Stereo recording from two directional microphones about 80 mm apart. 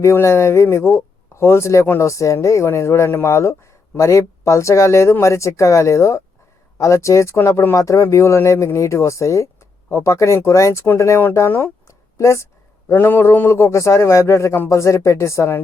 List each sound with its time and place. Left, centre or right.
0.0 s speech: left
11.9 s a sound: left
12.9 s speech: left